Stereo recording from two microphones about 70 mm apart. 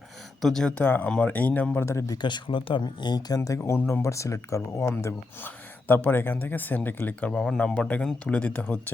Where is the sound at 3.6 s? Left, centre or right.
Left.